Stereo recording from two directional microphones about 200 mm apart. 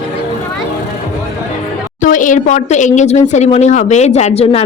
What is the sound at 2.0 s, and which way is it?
A woman's voice, 40° left (ahead or behind).